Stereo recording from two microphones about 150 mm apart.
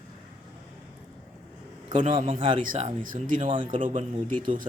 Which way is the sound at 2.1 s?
40° right (ahead or behind).